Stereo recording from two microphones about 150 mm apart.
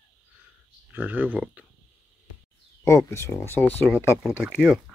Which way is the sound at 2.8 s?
20° left (ahead or behind).